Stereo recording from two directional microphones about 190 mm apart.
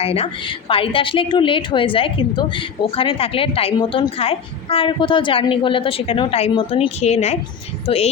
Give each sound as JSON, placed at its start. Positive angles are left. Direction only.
{"t": 0.0, "sound": "a woman's voice", "side_deg": 30}